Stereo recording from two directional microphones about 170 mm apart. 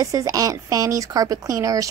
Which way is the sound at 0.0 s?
20° right (ahead or behind).